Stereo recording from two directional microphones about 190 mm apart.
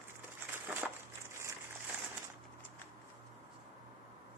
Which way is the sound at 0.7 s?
10° right (ahead or behind).